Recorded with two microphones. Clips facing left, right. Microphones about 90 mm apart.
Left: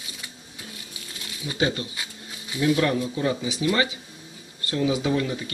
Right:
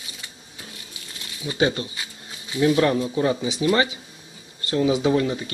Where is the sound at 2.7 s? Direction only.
35° right (ahead or behind).